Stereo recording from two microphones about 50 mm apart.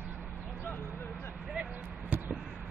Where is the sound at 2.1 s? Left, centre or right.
Right.